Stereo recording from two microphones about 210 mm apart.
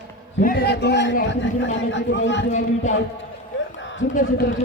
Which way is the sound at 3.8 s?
60° left (ahead or behind).